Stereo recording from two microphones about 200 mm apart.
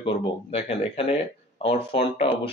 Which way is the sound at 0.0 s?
30° left (ahead or behind).